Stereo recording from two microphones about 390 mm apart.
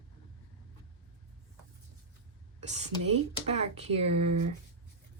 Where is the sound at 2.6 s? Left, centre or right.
Centre.